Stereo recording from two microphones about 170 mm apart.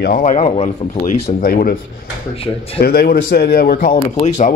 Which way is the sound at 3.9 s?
40° left (ahead or behind).